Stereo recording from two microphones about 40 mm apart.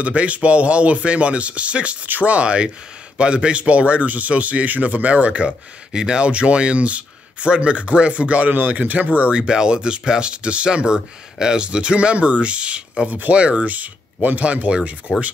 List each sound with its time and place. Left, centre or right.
0.0 s speech: right
2.0 s speech: right
9.3 s speech: right
14.4 s speech: right
15.1 s speech: right